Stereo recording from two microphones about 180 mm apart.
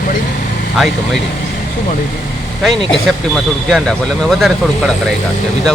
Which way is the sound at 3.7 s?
Centre (ahead or behind).